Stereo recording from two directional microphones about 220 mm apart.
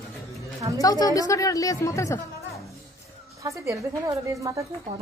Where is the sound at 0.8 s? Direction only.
15° left (ahead or behind).